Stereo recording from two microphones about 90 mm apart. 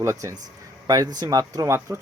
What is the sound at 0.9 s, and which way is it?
Speech, 45° right (ahead or behind).